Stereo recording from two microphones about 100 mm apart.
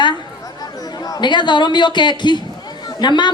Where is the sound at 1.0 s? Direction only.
40° left (ahead or behind).